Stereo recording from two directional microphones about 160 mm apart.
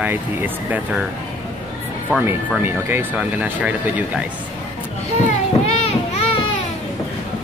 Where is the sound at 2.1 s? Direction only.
10° right (ahead or behind).